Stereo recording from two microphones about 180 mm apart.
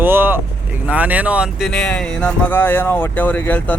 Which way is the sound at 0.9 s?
10° right (ahead or behind).